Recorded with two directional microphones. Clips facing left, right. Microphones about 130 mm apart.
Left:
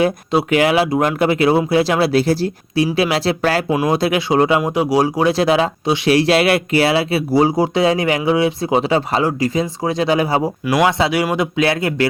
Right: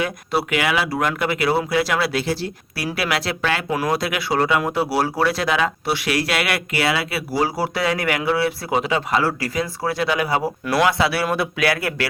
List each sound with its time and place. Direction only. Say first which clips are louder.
0.0 s speech: left 6 dB; 30° left (ahead or behind)
2.7 s speech: left 7 dB; 25° left (ahead or behind)
3.7 s speech: left 5 dB; 20° left (ahead or behind)
5.3 s speech: left 6 dB; 30° left (ahead or behind)
8.9 s speech: left 4 dB; 30° left (ahead or behind)
9.2 s speech: left 5 dB; 20° left (ahead or behind)
10.4 s speech: left 3 dB; 15° left (ahead or behind)